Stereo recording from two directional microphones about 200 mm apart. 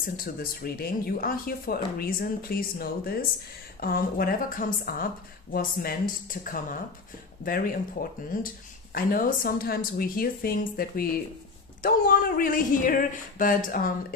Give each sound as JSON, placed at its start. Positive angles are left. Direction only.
{"t": 0.0, "sound": "speech", "side_deg": 45}